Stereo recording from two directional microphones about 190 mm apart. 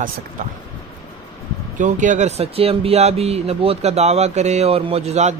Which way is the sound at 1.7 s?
40° right (ahead or behind).